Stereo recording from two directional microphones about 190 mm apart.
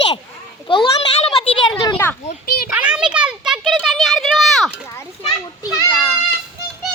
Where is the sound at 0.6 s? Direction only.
25° left (ahead or behind).